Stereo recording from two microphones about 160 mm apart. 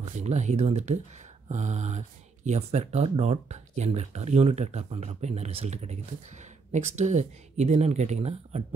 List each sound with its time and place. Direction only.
0.0 s speech: 45° right (ahead or behind)